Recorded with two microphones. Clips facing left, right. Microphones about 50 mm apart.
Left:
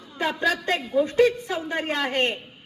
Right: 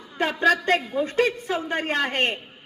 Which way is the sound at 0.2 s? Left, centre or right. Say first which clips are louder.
Right 3 dB; right.